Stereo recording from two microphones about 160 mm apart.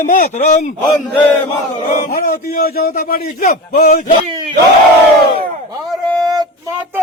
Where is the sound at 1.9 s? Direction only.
60° left (ahead or behind).